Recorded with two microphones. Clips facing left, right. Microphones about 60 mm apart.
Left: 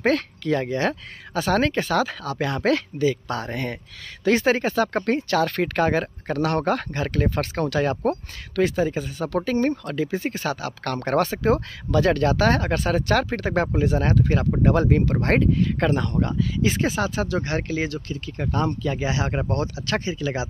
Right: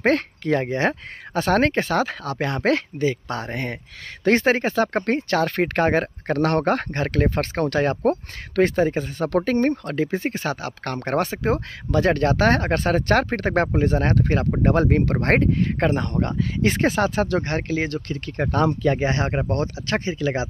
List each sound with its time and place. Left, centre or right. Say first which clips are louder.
0.0 s speech: right 2 dB; right
4.2 s speech: right 1 dB; right
16.1 s speech: even; right
18.9 s speech: right 2 dB; right